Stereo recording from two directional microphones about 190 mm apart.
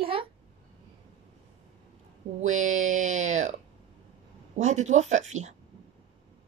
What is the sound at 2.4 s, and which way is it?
A woman's voice, 40° right (ahead or behind).